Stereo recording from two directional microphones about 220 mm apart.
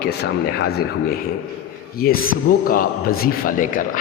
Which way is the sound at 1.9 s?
45° left (ahead or behind).